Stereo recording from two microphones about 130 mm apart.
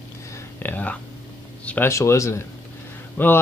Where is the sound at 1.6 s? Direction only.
10° left (ahead or behind).